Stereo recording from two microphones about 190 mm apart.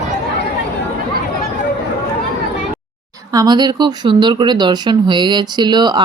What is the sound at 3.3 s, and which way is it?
Speech, 20° right (ahead or behind).